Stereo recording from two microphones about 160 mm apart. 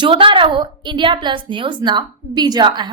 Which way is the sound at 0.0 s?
30° right (ahead or behind).